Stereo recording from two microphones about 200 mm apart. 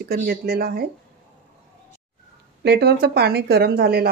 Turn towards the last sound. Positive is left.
turn(degrees=-55)  # may be behind; listen again after turning